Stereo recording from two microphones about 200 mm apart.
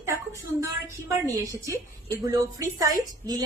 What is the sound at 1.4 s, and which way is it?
A woman's voice, 15° right (ahead or behind).